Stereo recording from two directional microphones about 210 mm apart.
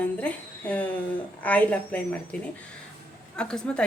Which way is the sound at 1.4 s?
5° left (ahead or behind).